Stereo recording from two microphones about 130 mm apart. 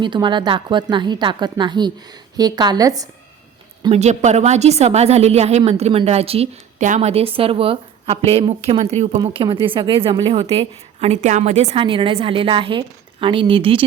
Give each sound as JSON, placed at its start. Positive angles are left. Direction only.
{"t": 0.0, "sound": "a woman's voice", "side_deg": -35}
{"t": 3.9, "sound": "a woman's voice", "side_deg": -60}
{"t": 6.7, "sound": "a woman's voice", "side_deg": -70}
{"t": 7.1, "sound": "a woman's voice", "side_deg": -50}
{"t": 9.2, "sound": "a woman's voice", "side_deg": -40}
{"t": 11.2, "sound": "a woman's voice", "side_deg": -65}
{"t": 11.8, "sound": "a woman's voice", "side_deg": -40}